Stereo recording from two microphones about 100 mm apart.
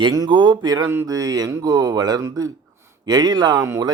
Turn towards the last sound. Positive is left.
turn(degrees=-35)  # may be behind; listen again after turning